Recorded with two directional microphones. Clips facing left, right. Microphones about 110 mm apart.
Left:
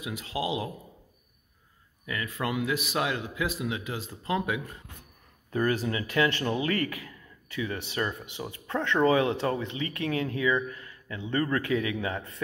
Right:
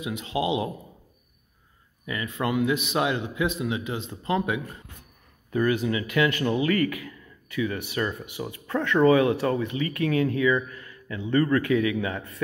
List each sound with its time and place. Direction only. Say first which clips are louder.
0.0 s a man's voice: right 5 dB; centre (ahead or behind)
2.0 s a man's voice: right 4 dB; 5° right (ahead or behind)
5.5 s speech: right 3 dB; 35° left (ahead or behind)